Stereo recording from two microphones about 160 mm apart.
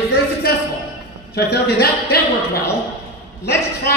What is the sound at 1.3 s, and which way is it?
A woman's voice, 90° left.